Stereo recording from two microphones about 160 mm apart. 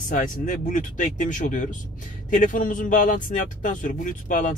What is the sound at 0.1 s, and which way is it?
A man's voice, 55° left (ahead or behind).